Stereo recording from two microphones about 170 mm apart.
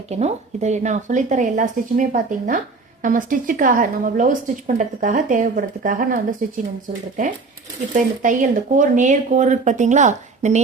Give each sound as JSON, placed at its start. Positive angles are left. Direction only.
{"t": 0.1, "sound": "a woman's voice", "side_deg": -40}
{"t": 7.9, "sound": "a woman's voice", "side_deg": -50}